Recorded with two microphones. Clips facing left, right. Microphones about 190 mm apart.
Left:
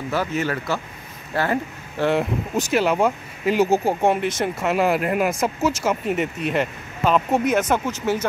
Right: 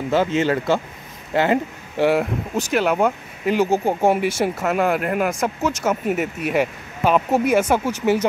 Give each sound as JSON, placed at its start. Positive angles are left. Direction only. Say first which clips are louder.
{"t": 0.4, "sound": "speech", "louder": "right 5 dB", "side_deg": -25}
{"t": 2.7, "sound": "speech", "louder": "right 1 dB", "side_deg": 0}
{"t": 4.0, "sound": "speech", "louder": "right 2 dB", "side_deg": -5}